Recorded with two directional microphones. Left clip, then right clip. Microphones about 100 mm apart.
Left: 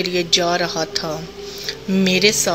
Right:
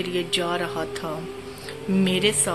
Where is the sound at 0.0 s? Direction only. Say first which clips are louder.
Left 7 dB; 45° left (ahead or behind).